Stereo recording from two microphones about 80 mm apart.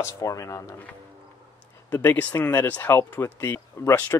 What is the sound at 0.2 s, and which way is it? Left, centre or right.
Speech, left.